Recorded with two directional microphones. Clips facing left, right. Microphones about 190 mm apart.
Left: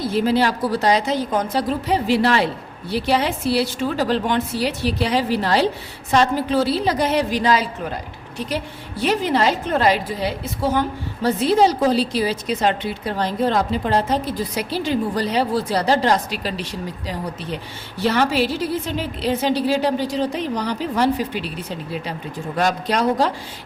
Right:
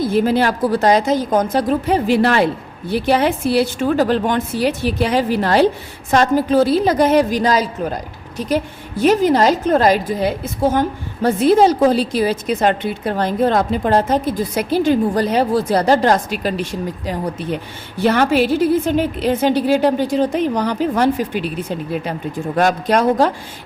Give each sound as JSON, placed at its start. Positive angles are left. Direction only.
{"t": 0.0, "sound": "a woman's voice", "side_deg": -50}